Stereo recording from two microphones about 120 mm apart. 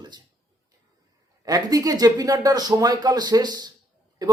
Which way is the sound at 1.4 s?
30° right (ahead or behind).